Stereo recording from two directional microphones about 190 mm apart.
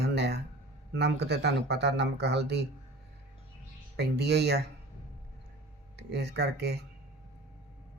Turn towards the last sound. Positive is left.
turn(degrees=-60)  # may be behind; listen again after turning